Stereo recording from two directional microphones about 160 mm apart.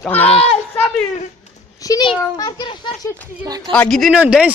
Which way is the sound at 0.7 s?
10° left (ahead or behind).